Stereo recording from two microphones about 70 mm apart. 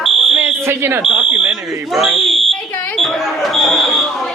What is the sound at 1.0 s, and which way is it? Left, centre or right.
Fire alarm, centre.